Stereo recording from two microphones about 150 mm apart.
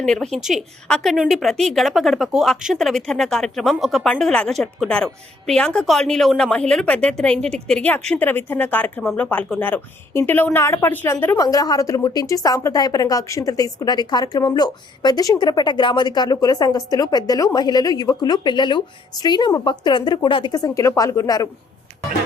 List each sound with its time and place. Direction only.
0.0 s a woman's voice: 5° left (ahead or behind)
11.3 s a woman's voice: 25° left (ahead or behind)